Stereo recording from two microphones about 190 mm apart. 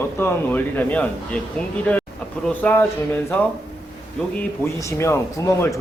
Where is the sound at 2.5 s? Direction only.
10° left (ahead or behind).